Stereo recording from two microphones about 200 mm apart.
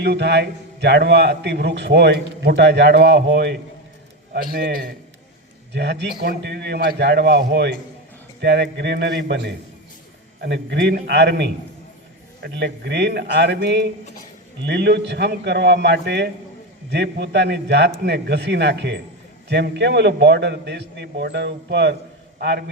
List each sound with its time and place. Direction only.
0.0 s a man's voice: 55° right (ahead or behind)
5.7 s a man's voice: 55° right (ahead or behind)